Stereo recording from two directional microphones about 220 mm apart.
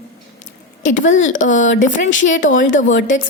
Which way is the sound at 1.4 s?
35° left (ahead or behind).